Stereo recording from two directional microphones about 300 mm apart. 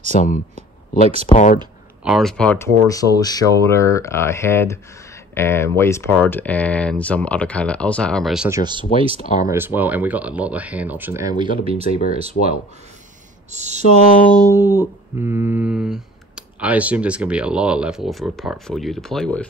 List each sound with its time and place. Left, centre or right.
0.1 s speech: left
2.0 s speech: centre
9.2 s speech: left
9.5 s speech: centre; by 13.8 s right
14.0 s speech: left
14.3 s speech: centre